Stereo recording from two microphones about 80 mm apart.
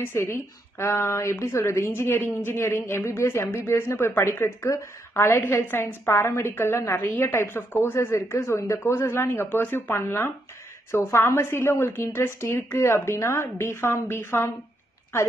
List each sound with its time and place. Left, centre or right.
0.0 s a woman's voice: left